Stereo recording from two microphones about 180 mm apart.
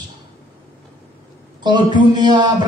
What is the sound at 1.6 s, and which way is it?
A man's voice, 25° right (ahead or behind).